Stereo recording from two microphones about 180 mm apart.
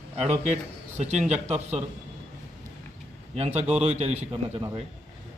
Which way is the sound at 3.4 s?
35° right (ahead or behind).